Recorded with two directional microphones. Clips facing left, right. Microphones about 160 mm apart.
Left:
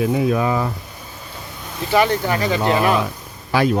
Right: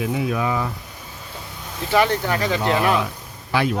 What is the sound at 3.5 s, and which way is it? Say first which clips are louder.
Speech: left 4 dB; 40° left (ahead or behind).